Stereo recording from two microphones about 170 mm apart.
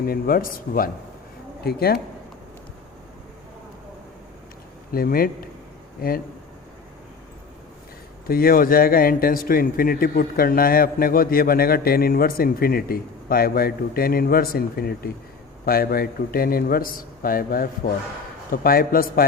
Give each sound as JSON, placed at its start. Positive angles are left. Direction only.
{"t": 0.1, "sound": "speech", "side_deg": 60}
{"t": 4.9, "sound": "speech", "side_deg": 60}
{"t": 8.3, "sound": "speech", "side_deg": 60}